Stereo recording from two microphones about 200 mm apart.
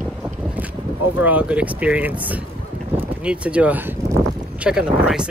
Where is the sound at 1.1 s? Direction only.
5° right (ahead or behind).